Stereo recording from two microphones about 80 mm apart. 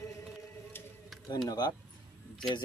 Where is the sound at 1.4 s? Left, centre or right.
Left.